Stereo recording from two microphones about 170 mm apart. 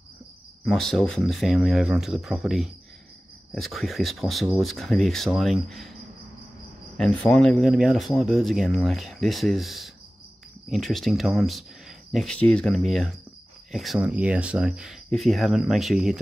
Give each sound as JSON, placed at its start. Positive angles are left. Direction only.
{"t": 0.7, "sound": "speech", "side_deg": 0}
{"t": 7.0, "sound": "speech", "side_deg": 5}